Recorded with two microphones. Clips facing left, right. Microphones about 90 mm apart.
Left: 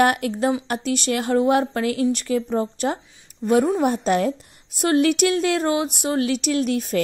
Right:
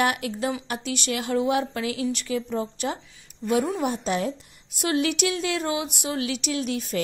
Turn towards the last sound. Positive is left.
turn(degrees=50)  # may be behind; listen again after turning